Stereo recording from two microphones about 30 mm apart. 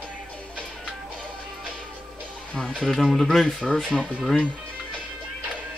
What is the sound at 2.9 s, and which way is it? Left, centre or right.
Speech, centre.